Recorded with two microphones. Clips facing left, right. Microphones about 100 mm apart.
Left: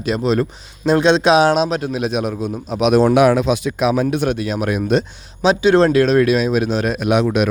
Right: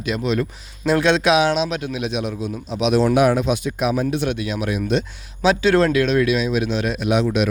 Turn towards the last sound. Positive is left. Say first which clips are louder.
# left 3 dB
turn(degrees=55)  # may be behind; listen again after turning